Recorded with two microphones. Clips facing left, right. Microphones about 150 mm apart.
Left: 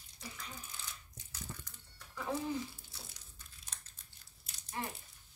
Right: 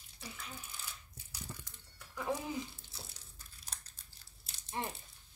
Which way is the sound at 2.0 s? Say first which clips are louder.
Right 1 dB; 5° right (ahead or behind).